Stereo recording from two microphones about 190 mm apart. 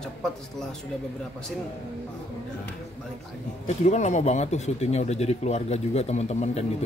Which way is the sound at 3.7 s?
35° left (ahead or behind).